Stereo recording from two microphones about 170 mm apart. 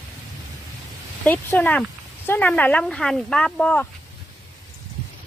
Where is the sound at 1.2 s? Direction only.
10° left (ahead or behind).